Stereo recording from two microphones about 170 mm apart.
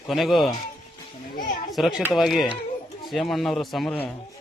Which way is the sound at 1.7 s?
Centre (ahead or behind).